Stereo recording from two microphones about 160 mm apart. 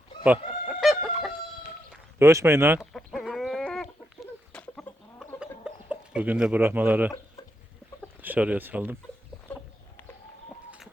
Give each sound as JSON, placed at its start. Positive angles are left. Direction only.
{"t": 0.3, "sound": "chicken", "side_deg": -5}
{"t": 2.1, "sound": "speech", "side_deg": -15}
{"t": 2.9, "sound": "chicken", "side_deg": 0}
{"t": 5.4, "sound": "chicken", "side_deg": -5}
{"t": 8.2, "sound": "speech", "side_deg": -10}